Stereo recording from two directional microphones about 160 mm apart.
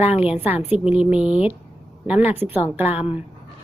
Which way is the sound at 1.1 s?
5° right (ahead or behind).